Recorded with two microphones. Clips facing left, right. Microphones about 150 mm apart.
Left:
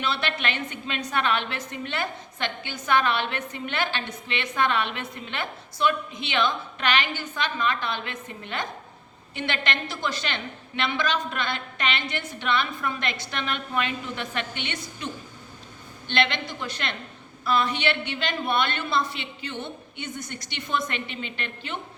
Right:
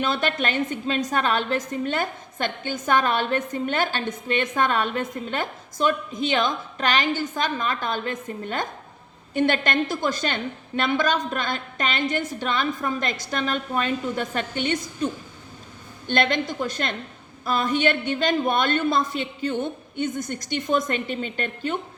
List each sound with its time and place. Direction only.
0.0 s a woman's voice: 45° right (ahead or behind)
16.0 s a woman's voice: 45° right (ahead or behind)